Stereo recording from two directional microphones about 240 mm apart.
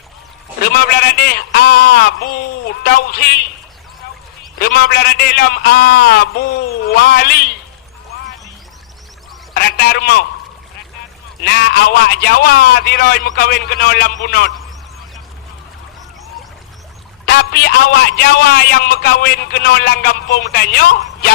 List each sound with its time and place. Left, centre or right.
0.6 s a man's voice: left
4.6 s a man's voice: left
9.6 s a sound: left
11.4 s a man's voice: left
17.2 s a man's voice: left